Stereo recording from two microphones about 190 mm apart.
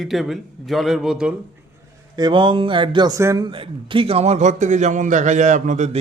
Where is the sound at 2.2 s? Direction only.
25° right (ahead or behind).